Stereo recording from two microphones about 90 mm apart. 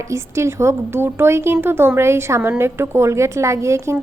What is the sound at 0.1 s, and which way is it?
A woman's voice, 30° right (ahead or behind).